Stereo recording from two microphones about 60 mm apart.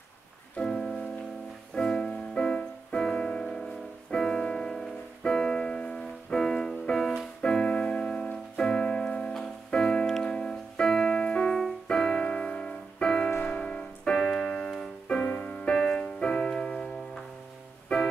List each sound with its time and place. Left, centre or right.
0.6 s music: centre
11.9 s keyboard: centre
13.4 s music: centre
15.2 s music: left
15.7 s music: centre
17.9 s music: centre